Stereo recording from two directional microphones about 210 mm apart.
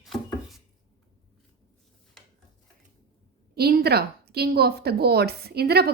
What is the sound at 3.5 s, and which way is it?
A woman's voice, 50° right (ahead or behind).